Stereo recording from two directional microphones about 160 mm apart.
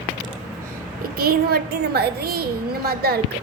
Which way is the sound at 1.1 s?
75° right (ahead or behind).